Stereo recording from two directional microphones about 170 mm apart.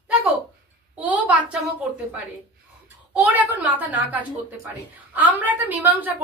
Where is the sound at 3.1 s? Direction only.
10° right (ahead or behind).